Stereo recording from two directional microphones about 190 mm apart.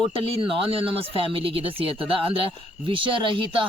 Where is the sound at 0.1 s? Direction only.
30° right (ahead or behind).